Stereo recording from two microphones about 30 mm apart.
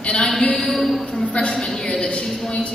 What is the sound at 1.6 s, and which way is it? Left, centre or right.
A woman's voice, left.